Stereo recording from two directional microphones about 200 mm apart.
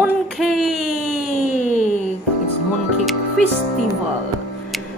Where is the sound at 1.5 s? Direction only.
35° left (ahead or behind).